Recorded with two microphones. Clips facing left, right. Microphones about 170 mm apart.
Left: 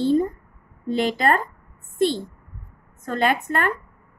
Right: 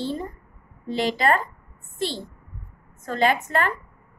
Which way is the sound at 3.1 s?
55° left (ahead or behind).